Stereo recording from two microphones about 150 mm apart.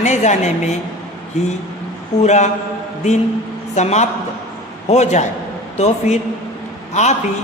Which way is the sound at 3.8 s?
50° left (ahead or behind).